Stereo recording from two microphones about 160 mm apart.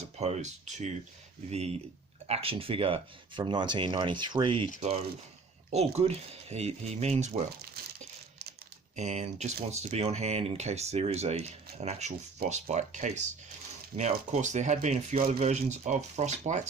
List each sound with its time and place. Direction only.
0.2 s speech: 45° right (ahead or behind)
9.0 s speech: 45° right (ahead or behind)